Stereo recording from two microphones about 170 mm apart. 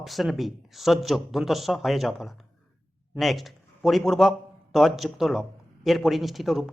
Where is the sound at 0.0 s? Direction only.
Centre (ahead or behind).